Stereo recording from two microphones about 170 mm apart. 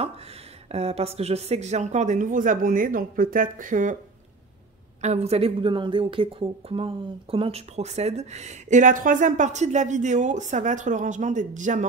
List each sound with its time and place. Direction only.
0.7 s speech: 35° right (ahead or behind)
5.0 s a woman's voice: 40° right (ahead or behind)